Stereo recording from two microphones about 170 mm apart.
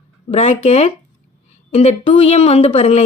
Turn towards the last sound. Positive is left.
turn(degrees=35)  # may be behind; listen again after turning